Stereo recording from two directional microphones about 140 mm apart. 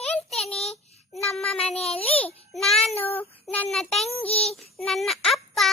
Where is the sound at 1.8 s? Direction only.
45° left (ahead or behind).